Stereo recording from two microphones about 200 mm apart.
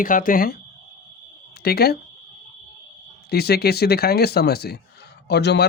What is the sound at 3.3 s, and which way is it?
A man's voice, 50° left (ahead or behind).